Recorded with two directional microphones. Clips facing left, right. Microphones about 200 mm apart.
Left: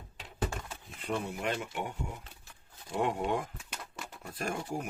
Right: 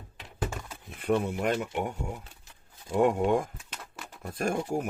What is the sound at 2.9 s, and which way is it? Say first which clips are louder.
Speech: right 7 dB; 50° right (ahead or behind).